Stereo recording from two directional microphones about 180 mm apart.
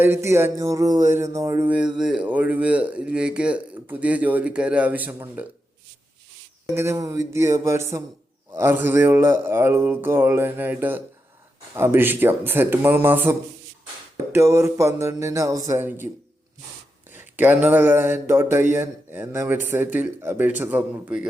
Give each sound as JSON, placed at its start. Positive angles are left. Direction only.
{"t": 0.0, "sound": "speech", "side_deg": -15}
{"t": 2.0, "sound": "speech", "side_deg": -5}
{"t": 6.7, "sound": "speech", "side_deg": -15}
{"t": 14.3, "sound": "speech", "side_deg": -15}
{"t": 17.2, "sound": "speech", "side_deg": -10}